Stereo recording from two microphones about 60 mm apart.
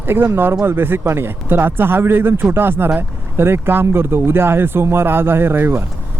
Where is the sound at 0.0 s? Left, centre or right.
Right.